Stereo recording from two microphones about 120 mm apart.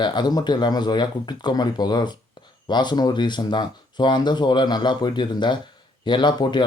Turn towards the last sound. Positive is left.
turn(degrees=40)  # may be behind; listen again after turning